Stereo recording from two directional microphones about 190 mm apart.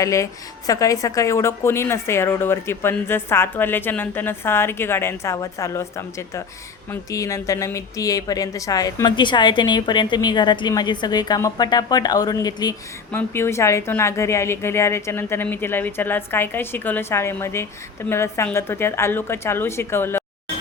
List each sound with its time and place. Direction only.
0.0 s a woman's voice: 15° left (ahead or behind)